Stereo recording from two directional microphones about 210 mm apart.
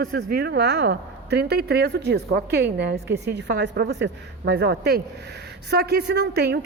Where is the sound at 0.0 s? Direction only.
45° right (ahead or behind).